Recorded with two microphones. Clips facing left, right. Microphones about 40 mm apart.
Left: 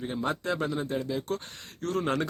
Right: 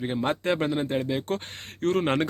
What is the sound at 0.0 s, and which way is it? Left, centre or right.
Speech, right.